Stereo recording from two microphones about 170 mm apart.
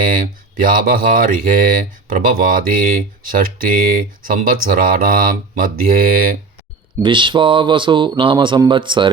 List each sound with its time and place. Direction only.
0.6 s speech: 55° right (ahead or behind)
7.0 s speech: 30° right (ahead or behind)